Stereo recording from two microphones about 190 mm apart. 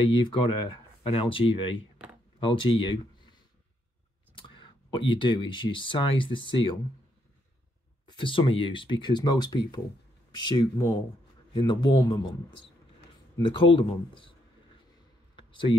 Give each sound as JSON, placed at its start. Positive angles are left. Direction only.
{"t": 0.0, "sound": "speech", "side_deg": 25}
{"t": 4.4, "sound": "speech", "side_deg": 25}
{"t": 8.1, "sound": "speech", "side_deg": 25}
{"t": 13.4, "sound": "speech", "side_deg": 25}
{"t": 15.3, "sound": "a sound", "side_deg": 25}